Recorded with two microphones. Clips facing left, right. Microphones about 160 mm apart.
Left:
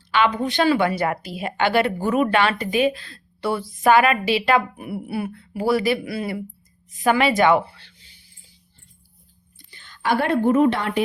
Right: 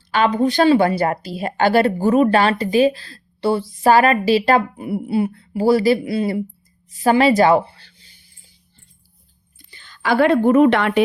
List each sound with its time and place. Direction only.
0.1 s speech: 40° right (ahead or behind)
4.8 s speech: 25° right (ahead or behind)
7.0 s speech: 35° right (ahead or behind)
9.6 s a woman's voice: 90° right; by 11.0 s 75° right (ahead or behind)